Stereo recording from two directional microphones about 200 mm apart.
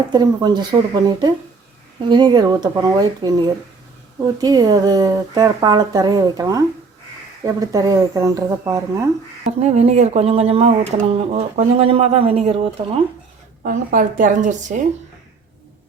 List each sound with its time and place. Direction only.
0.1 s speech: 20° right (ahead or behind)
9.5 s speech: 35° right (ahead or behind)
13.6 s speech: 45° right (ahead or behind)